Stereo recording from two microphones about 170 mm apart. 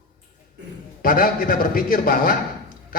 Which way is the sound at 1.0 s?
55° left (ahead or behind).